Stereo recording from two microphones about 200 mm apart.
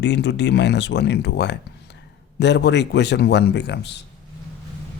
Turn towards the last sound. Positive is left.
turn(degrees=60)  # may be behind; listen again after turning